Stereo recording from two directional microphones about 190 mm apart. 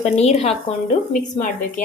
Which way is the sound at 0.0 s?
35° left (ahead or behind).